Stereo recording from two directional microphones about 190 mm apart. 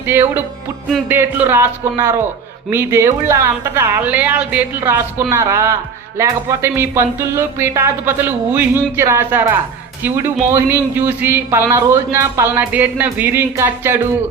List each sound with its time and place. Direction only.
0.0 s speech: 10° right (ahead or behind)